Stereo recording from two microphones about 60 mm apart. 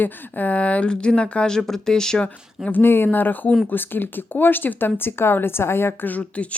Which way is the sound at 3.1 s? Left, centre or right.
Left.